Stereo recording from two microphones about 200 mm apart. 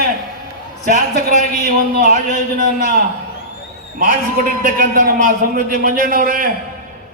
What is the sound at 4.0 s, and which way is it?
A man's voice, 45° right (ahead or behind).